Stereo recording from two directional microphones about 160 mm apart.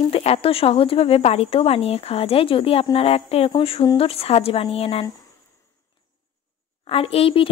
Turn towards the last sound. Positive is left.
turn(degrees=35)  # may be behind; listen again after turning